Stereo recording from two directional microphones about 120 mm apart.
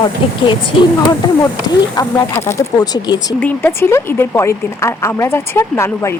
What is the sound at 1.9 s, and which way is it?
Speech, 30° left (ahead or behind).